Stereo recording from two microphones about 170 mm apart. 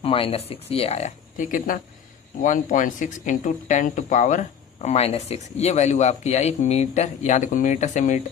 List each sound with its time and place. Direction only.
0.0 s speech: 35° left (ahead or behind)